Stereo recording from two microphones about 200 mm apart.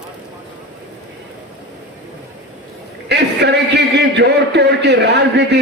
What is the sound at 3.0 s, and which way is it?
A man's voice, 60° right (ahead or behind).